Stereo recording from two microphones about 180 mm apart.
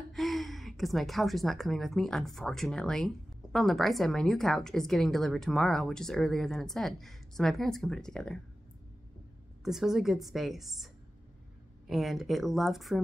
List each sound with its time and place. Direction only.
0.1 s a woman's voice: centre (ahead or behind)
9.7 s a woman's voice: centre (ahead or behind)
11.9 s a woman's voice: centre (ahead or behind)